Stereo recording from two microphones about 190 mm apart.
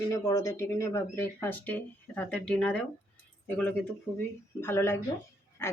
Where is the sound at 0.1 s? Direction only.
15° left (ahead or behind).